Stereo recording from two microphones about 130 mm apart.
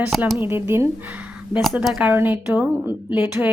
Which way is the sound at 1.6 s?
Centre (ahead or behind).